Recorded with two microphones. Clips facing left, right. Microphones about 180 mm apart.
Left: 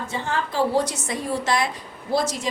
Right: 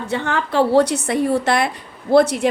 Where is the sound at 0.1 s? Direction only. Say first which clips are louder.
Right 7 dB; 65° right (ahead or behind).